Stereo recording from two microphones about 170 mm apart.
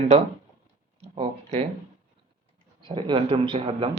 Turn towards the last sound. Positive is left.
turn(degrees=-30)  # may be behind; listen again after turning